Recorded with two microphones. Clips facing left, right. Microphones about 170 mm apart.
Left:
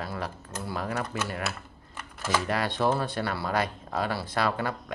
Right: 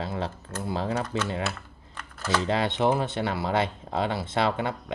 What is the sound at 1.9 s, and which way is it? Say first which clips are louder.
Typing: right 1 dB; 10° left (ahead or behind).